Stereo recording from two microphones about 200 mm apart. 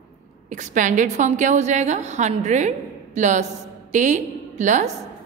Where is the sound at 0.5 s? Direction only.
40° right (ahead or behind).